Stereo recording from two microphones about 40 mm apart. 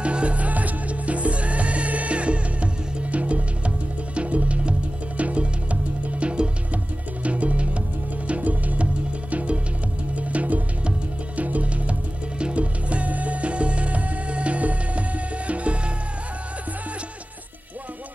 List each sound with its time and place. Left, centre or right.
0.0 s music: right